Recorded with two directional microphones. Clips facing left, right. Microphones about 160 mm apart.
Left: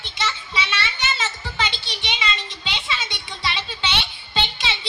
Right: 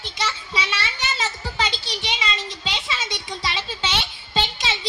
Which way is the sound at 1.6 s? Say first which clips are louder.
Right 1 dB; 40° right (ahead or behind).